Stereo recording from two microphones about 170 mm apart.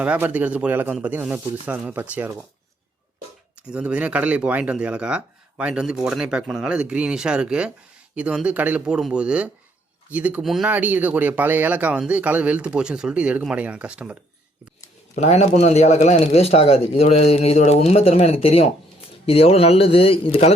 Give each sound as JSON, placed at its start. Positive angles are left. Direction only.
{"t": 0.0, "sound": "speech", "side_deg": -10}
{"t": 3.7, "sound": "speech", "side_deg": -5}
{"t": 15.2, "sound": "speech", "side_deg": 40}